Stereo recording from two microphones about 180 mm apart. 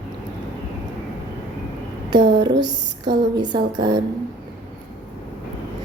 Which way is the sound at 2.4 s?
25° right (ahead or behind).